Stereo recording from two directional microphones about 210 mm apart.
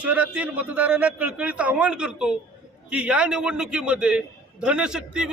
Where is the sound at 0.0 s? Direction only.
5° right (ahead or behind).